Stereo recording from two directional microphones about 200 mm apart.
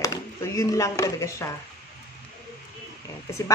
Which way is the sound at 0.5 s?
15° left (ahead or behind).